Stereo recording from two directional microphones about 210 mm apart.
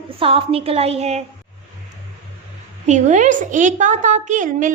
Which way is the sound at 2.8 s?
35° right (ahead or behind).